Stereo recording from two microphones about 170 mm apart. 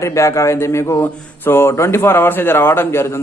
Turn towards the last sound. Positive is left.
turn(degrees=15)  # may be behind; listen again after turning